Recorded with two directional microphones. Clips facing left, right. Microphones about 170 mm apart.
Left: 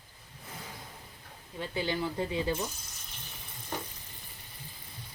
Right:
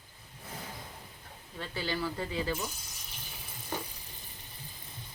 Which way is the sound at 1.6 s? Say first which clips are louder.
Left 2 dB; 20° left (ahead or behind).